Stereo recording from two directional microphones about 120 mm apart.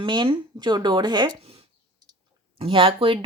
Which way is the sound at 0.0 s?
40° right (ahead or behind).